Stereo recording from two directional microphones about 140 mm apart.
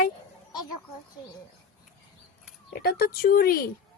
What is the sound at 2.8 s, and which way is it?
Speech, 90° left.